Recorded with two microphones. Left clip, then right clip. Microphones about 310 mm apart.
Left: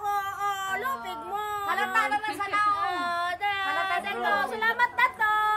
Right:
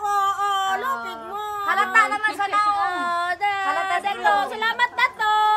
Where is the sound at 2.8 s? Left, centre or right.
Centre.